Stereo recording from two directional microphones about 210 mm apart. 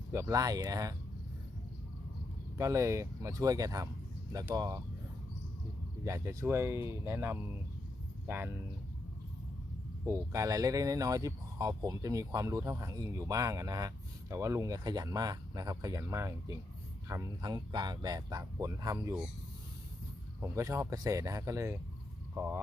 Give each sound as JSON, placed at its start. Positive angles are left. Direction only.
{"t": 0.1, "sound": "speech", "side_deg": -15}
{"t": 2.6, "sound": "speech", "side_deg": -15}
{"t": 6.1, "sound": "speech", "side_deg": -10}
{"t": 10.3, "sound": "speech", "side_deg": -15}
{"t": 20.4, "sound": "speech", "side_deg": -15}